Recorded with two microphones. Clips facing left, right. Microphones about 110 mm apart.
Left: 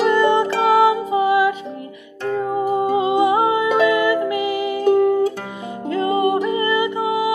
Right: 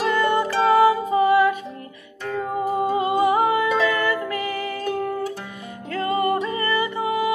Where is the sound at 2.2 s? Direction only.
20° left (ahead or behind).